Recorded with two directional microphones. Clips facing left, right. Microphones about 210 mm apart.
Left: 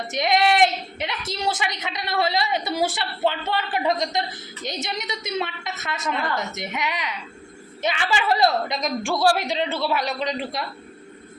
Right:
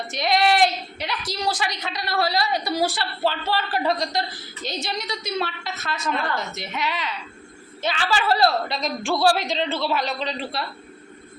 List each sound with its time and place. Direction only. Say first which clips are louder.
0.1 s a woman's voice: even; 20° left (ahead or behind)